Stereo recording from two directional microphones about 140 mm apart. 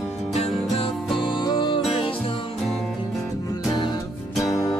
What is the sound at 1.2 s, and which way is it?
Music, 35° left (ahead or behind).